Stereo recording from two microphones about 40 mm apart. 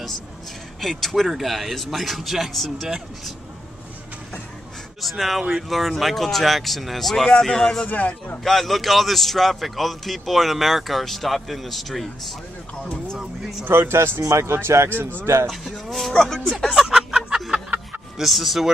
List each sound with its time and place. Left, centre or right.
0.7 s a man's voice: centre
5.0 s a man's voice: centre
7.2 s a man's voice: centre
7.8 s speech: left
8.5 s a man's voice: centre
13.2 s speech: centre
13.7 s speech: right
15.5 s a man's voice: centre
16.7 s a sound: centre
18.1 s a man's voice: centre